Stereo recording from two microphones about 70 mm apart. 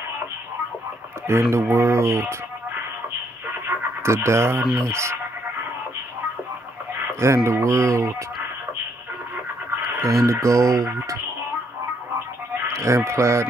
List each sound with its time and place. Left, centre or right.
1.5 s speech: right
3.6 s radio: right
4.8 s speech: right
7.2 s speech: right
10.0 s speech: right
12.7 s speech: right